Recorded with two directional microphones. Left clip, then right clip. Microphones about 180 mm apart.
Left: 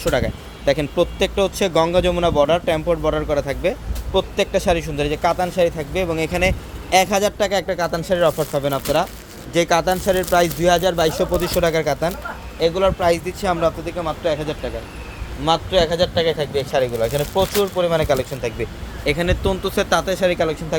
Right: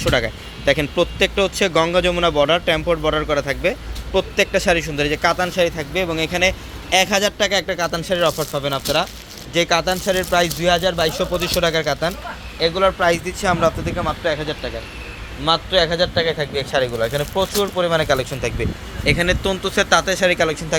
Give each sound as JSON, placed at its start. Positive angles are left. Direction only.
{"t": 0.0, "sound": "speech", "side_deg": 5}